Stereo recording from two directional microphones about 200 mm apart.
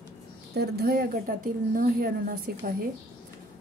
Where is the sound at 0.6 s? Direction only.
50° right (ahead or behind).